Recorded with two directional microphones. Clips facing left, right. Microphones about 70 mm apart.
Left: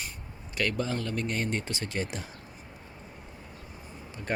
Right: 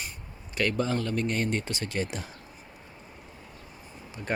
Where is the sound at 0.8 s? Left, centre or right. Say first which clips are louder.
Right 3 dB; right.